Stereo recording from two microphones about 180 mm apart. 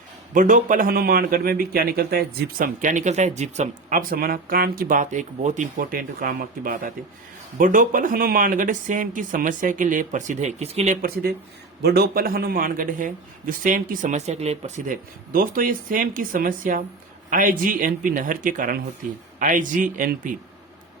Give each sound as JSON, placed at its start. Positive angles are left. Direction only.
{"t": 0.3, "sound": "a man's voice", "side_deg": -50}
{"t": 11.0, "sound": "a man's voice", "side_deg": -60}
{"t": 15.3, "sound": "a man's voice", "side_deg": -50}